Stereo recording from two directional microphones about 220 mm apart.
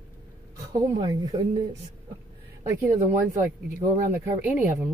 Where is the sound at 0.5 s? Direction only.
15° right (ahead or behind).